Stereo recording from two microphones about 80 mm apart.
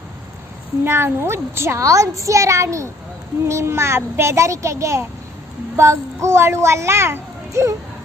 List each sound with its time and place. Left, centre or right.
0.9 s a child's voice: right